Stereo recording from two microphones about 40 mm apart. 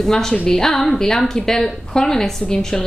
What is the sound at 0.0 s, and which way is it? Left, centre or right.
A woman's voice, centre.